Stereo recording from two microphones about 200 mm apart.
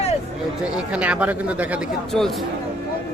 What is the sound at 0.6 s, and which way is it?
Speech, 5° right (ahead or behind).